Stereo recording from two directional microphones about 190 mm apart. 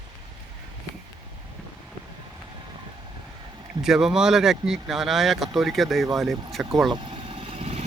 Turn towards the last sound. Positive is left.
turn(degrees=-30)  # may be behind; listen again after turning